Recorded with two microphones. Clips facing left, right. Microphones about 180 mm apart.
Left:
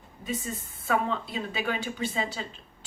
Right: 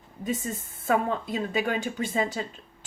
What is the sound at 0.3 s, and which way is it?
A woman's voice, 50° right (ahead or behind).